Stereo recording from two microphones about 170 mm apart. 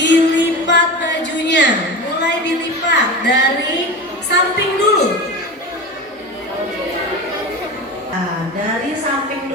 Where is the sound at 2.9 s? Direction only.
90° left.